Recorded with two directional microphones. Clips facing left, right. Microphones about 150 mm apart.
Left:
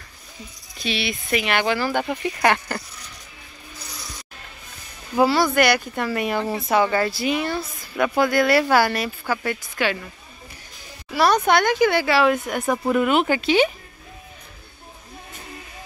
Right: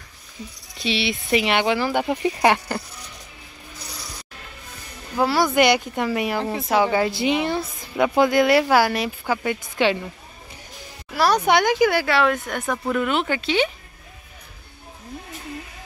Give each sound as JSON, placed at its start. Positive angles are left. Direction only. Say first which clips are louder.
{"t": 0.8, "sound": "speech", "louder": "right 2 dB", "side_deg": -25}
{"t": 1.8, "sound": "a woman's voice", "louder": "right 2 dB", "side_deg": -15}
{"t": 5.3, "sound": "a woman's voice", "louder": "right 1 dB", "side_deg": -15}
{"t": 6.4, "sound": "speech", "louder": "even", "side_deg": 0}
{"t": 6.8, "sound": "a woman's voice", "louder": "right 3 dB", "side_deg": -10}
{"t": 11.1, "sound": "a sound", "louder": "left 1 dB", "side_deg": 0}
{"t": 11.3, "sound": "speech", "louder": "even", "side_deg": -10}